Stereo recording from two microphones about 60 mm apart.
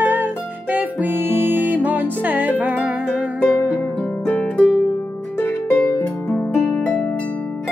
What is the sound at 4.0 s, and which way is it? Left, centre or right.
Harp, left.